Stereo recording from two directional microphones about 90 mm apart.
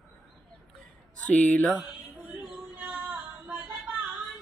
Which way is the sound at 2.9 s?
20° right (ahead or behind).